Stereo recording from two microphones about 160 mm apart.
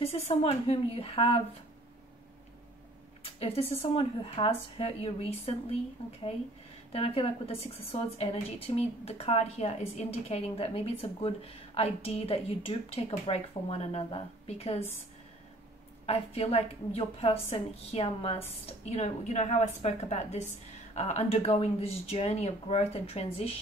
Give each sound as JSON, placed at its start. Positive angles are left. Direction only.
{"t": 0.0, "sound": "a woman's voice", "side_deg": 40}
{"t": 3.3, "sound": "a woman's voice", "side_deg": 40}
{"t": 6.9, "sound": "a woman's voice", "side_deg": 35}
{"t": 16.1, "sound": "a woman's voice", "side_deg": 40}